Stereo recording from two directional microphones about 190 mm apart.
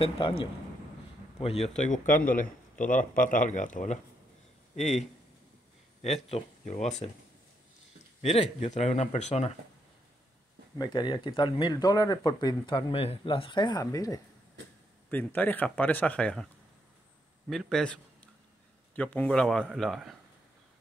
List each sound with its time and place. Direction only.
1.4 s speech: 35° left (ahead or behind)
1.8 s speech: 45° left (ahead or behind)
6.0 s speech: 35° left (ahead or behind)
8.2 s speech: 35° left (ahead or behind)
10.8 s speech: 25° left (ahead or behind); by 16.4 s 5° left (ahead or behind)
17.5 s a man's voice: centre (ahead or behind)